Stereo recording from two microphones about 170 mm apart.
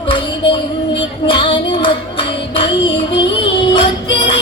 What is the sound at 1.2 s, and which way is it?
Child singing, 30° left (ahead or behind).